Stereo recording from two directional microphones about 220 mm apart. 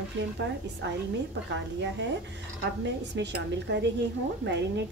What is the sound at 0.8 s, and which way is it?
A woman's voice, 55° right (ahead or behind).